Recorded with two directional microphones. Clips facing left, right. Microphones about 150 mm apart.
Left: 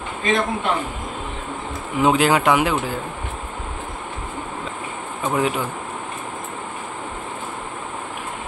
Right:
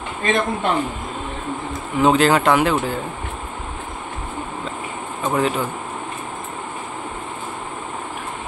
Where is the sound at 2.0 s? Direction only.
10° left (ahead or behind).